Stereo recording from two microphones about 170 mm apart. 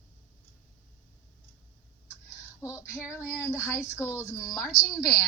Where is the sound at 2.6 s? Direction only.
15° left (ahead or behind).